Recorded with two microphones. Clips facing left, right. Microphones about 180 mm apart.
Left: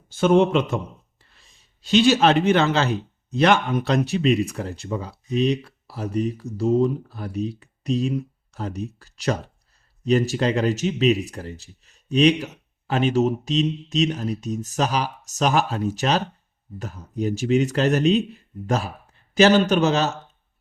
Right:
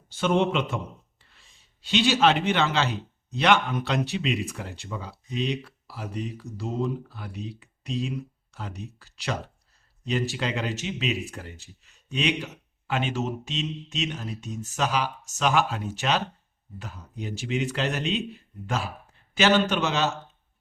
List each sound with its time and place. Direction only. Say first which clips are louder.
0.1 s speech: left 6 dB; 45° left (ahead or behind)